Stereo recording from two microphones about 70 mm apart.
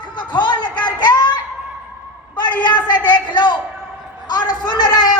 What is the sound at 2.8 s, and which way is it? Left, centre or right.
Speech, left.